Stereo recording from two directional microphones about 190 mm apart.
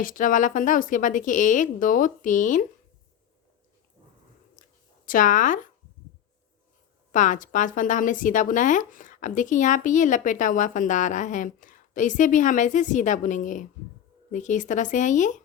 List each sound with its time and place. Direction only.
0.0 s speech: 45° left (ahead or behind)
5.0 s speech: 45° left (ahead or behind)
7.1 s speech: 45° left (ahead or behind)